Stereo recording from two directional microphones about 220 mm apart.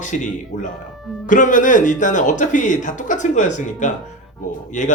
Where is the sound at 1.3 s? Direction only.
35° left (ahead or behind).